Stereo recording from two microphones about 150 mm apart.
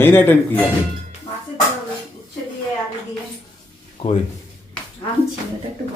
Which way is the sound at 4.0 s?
35° left (ahead or behind).